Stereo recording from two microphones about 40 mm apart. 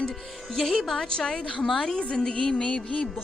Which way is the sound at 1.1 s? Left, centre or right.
Centre.